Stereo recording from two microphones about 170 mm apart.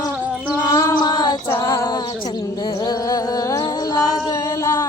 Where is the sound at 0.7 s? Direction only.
20° left (ahead or behind).